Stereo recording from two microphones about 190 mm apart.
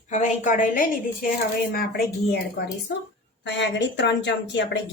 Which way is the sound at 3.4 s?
70° left (ahead or behind).